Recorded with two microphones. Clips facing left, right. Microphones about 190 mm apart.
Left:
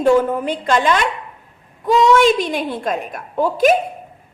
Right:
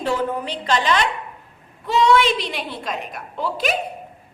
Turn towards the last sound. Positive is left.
turn(degrees=50)  # may be behind; listen again after turning